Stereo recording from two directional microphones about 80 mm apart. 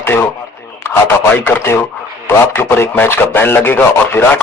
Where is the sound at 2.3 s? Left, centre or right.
Left.